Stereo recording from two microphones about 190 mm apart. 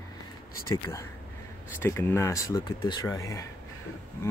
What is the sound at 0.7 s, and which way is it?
Speech, 15° left (ahead or behind).